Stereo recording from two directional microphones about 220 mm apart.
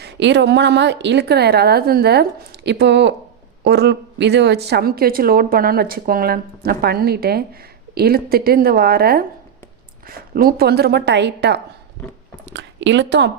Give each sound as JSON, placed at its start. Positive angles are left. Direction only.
{"t": 0.0, "sound": "a woman's voice", "side_deg": -55}